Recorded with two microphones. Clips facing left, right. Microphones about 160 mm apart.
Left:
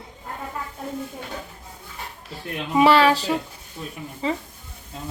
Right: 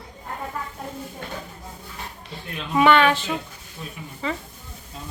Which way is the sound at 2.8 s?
30° left (ahead or behind).